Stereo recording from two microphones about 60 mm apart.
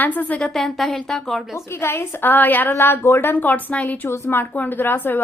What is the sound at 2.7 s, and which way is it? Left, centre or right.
Speech, left.